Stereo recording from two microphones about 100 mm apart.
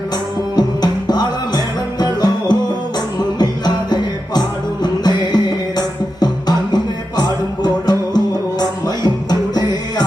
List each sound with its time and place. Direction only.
0.5 s music: 45° left (ahead or behind)